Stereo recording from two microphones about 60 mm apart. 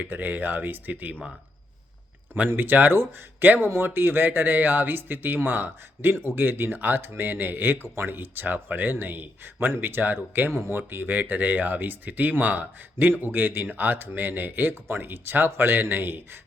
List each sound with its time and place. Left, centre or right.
0.0 s speech: right
2.3 s speech: right